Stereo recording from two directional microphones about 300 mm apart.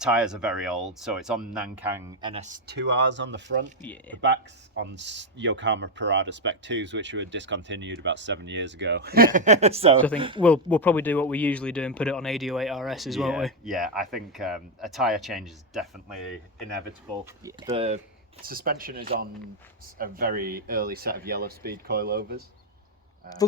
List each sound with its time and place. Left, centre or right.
0.0 s speech: centre
2.3 s speech: right
4.1 s speech: centre
4.8 s speech: right; by 10.4 s centre
10.4 s speech: centre
17.4 s speech: centre